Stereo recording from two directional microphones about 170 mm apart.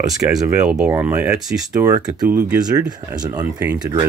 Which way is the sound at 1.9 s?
20° right (ahead or behind).